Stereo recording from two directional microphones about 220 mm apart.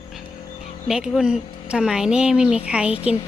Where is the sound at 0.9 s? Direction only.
5° right (ahead or behind).